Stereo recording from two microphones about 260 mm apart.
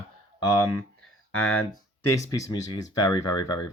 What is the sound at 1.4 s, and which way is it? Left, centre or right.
Speech, left.